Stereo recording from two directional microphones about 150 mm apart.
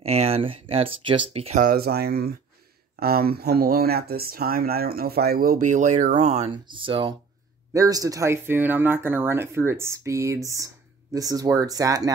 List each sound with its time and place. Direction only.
0.0 s speech: 45° right (ahead or behind)
1.6 s speech: 85° right; by 6.5 s 50° right (ahead or behind)
6.5 s speech: 30° right (ahead or behind)
7.7 s speech: 20° right (ahead or behind)